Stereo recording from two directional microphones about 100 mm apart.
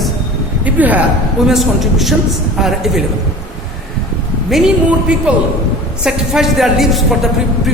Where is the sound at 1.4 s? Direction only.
Centre (ahead or behind).